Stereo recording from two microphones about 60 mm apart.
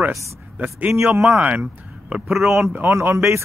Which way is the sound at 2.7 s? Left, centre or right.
Right.